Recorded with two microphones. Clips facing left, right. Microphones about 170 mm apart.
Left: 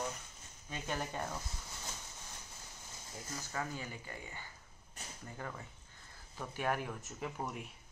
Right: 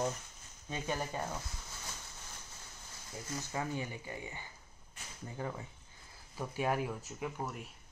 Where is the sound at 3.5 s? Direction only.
20° right (ahead or behind).